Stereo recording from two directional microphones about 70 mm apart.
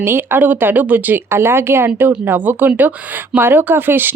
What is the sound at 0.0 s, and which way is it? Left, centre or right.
A woman's voice, right.